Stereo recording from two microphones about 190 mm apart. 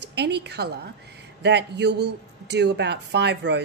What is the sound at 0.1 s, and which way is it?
A woman's voice, 60° right (ahead or behind).